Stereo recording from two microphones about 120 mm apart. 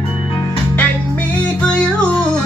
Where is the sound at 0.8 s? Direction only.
10° left (ahead or behind).